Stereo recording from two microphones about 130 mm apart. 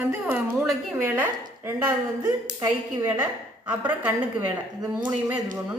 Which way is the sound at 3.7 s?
10° right (ahead or behind).